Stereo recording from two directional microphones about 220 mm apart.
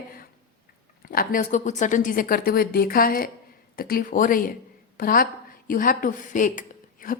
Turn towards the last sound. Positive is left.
turn(degrees=40)  # may be behind; listen again after turning